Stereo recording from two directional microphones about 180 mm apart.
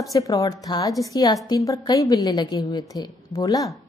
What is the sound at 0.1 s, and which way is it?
A woman's voice, 20° left (ahead or behind).